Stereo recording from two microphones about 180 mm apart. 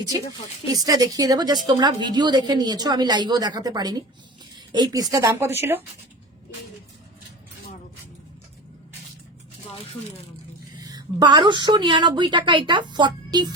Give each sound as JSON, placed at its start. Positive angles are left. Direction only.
{"t": 0.7, "sound": "a woman's voice", "side_deg": -20}
{"t": 10.8, "sound": "a woman's voice", "side_deg": -25}